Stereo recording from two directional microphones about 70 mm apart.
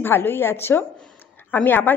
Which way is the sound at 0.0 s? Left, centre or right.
Left.